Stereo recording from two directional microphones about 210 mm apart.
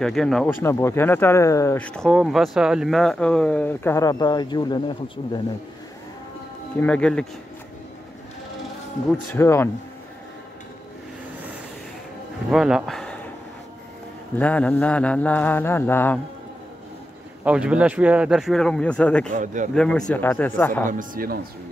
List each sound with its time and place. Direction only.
0.0 s speech: centre (ahead or behind); by 5.4 s 25° left (ahead or behind)
6.8 s speech: 5° left (ahead or behind)
9.3 s speech: 10° left (ahead or behind)
12.4 s speech: centre (ahead or behind)
14.4 s speech: 5° left (ahead or behind)
17.5 s speech: 5° right (ahead or behind)
19.3 s speech: 35° right (ahead or behind)
19.7 s speech: 5° left (ahead or behind)
20.8 s speech: 40° right (ahead or behind)